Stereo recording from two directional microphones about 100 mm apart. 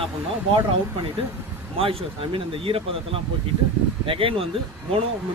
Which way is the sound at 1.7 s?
65° right (ahead or behind).